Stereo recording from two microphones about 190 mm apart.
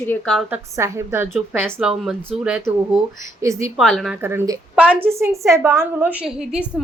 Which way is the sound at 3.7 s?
Centre (ahead or behind).